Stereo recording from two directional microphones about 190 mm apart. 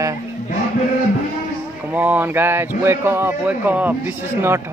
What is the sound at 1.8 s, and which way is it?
A man's voice, 10° right (ahead or behind).